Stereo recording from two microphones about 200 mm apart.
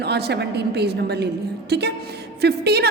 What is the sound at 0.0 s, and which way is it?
A woman's voice, 55° right (ahead or behind).